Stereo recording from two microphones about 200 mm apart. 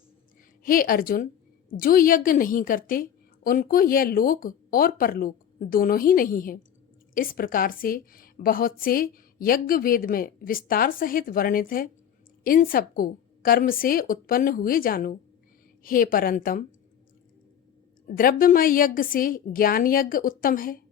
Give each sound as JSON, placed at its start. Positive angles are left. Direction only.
{"t": 0.6, "sound": "a woman's voice", "side_deg": 45}
{"t": 18.2, "sound": "a woman's voice", "side_deg": 45}